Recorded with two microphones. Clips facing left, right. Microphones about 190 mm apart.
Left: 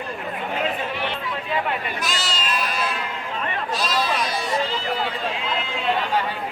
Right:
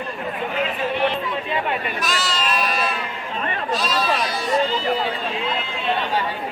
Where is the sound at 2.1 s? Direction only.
25° left (ahead or behind).